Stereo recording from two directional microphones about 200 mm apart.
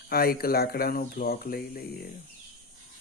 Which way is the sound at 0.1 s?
50° left (ahead or behind).